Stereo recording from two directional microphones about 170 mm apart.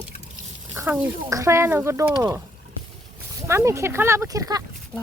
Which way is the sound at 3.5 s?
15° right (ahead or behind).